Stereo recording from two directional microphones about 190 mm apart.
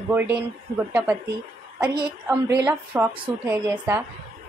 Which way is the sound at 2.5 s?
15° right (ahead or behind).